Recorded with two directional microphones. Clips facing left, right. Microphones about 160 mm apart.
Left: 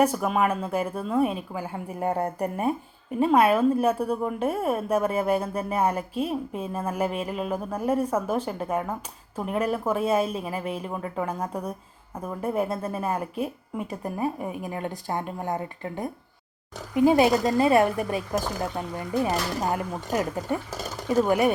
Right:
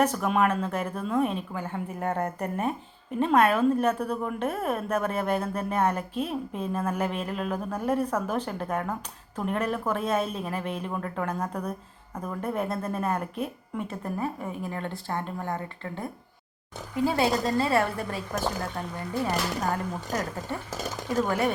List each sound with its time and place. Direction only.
0.0 s a woman's voice: 5° left (ahead or behind)